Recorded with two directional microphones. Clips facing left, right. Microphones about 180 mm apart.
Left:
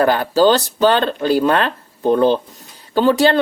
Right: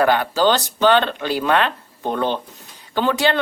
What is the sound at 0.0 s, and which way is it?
Speech, 40° left (ahead or behind).